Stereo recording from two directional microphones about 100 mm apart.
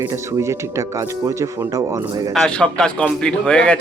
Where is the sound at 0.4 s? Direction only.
30° right (ahead or behind).